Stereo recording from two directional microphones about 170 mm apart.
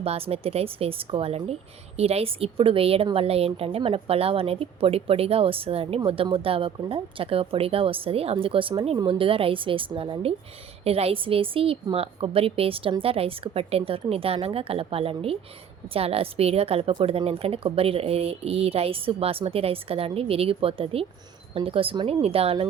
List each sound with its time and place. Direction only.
0.0 s a woman's voice: 35° right (ahead or behind)